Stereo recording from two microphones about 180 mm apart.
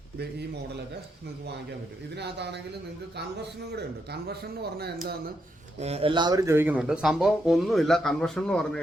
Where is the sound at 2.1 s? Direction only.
70° right (ahead or behind).